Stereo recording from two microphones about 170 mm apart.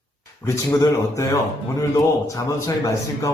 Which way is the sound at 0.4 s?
20° left (ahead or behind).